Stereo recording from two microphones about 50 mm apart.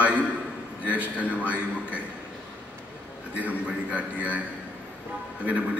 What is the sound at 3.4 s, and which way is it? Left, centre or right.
A man's voice, right.